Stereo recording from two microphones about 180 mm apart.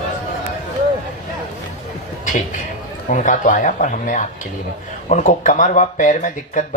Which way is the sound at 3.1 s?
45° left (ahead or behind).